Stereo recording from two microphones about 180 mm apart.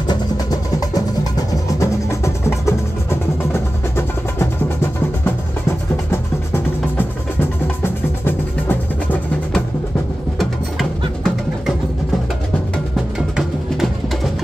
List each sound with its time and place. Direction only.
0.1 s music: 20° left (ahead or behind)
6.1 s music: 15° left (ahead or behind)
10.8 s music: centre (ahead or behind)
12.9 s music: centre (ahead or behind)